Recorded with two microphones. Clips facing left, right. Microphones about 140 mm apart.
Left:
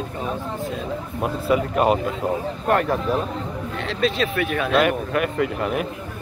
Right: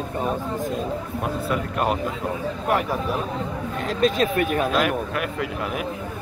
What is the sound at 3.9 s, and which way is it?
Speech, 45° right (ahead or behind).